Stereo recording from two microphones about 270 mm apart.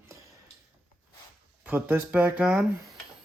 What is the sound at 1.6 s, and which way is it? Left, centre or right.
Speech, centre.